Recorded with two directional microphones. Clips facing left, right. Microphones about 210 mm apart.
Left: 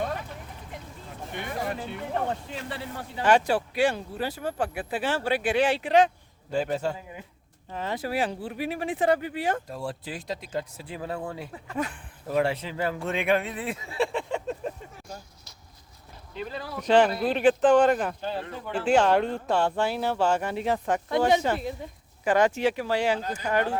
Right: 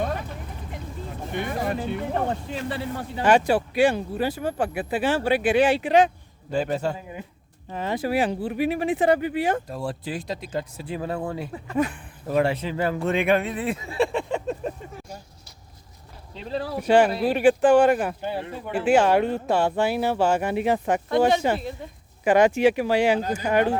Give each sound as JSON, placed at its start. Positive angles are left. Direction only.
{"t": 0.0, "sound": "vehicle", "side_deg": -55}
{"t": 1.3, "sound": "speech", "side_deg": -45}
{"t": 3.2, "sound": "speech", "side_deg": -10}
{"t": 6.5, "sound": "speech", "side_deg": -75}
{"t": 7.7, "sound": "speech", "side_deg": -15}
{"t": 9.6, "sound": "speech", "side_deg": -75}
{"t": 16.3, "sound": "speech", "side_deg": -30}
{"t": 16.8, "sound": "speech", "side_deg": -10}